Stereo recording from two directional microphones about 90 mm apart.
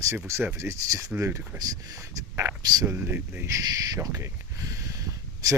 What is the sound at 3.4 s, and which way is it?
Speech, 35° right (ahead or behind).